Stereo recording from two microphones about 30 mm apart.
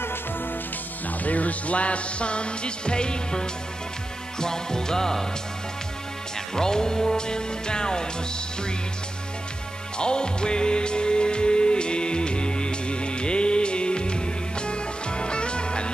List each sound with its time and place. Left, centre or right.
1.0 s music: left; by 5.2 s centre
6.5 s music: left
9.9 s music: left